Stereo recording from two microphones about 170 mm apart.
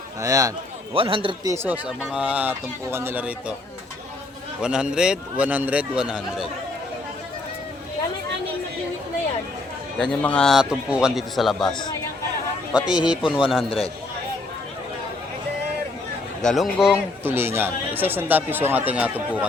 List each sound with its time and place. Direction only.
0.2 s a man's voice: 20° right (ahead or behind)
0.9 s a man's voice: 30° right (ahead or behind)
1.5 s speech: 15° right (ahead or behind)
4.6 s speech: 5° right (ahead or behind)
10.0 s speech: 5° left (ahead or behind)
12.7 s speech: 5° right (ahead or behind)
16.4 s speech: centre (ahead or behind)